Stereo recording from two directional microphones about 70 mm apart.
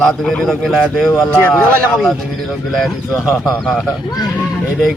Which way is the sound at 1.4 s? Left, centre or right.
Centre.